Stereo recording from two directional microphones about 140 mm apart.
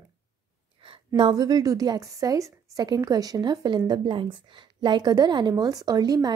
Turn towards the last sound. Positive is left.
turn(degrees=-30)  # may be behind; listen again after turning